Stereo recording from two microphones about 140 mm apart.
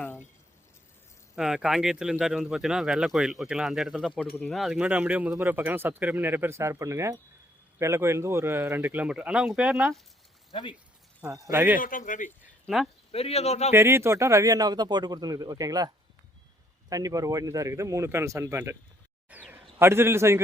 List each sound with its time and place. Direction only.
0.0 s a sound: 15° left (ahead or behind)
1.4 s speech: 5° right (ahead or behind)
11.3 s speech: 25° right (ahead or behind)
11.8 s speech: 75° left (ahead or behind)
12.6 s speech: centre (ahead or behind)
13.1 s speech: 45° left (ahead or behind)
13.7 s speech: 20° right (ahead or behind)
16.9 s a man's voice: 25° right (ahead or behind)